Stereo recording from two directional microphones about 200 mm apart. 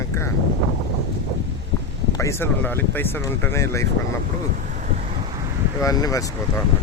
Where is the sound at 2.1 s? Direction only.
15° left (ahead or behind).